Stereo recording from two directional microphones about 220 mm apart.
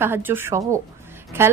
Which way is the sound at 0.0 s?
10° right (ahead or behind).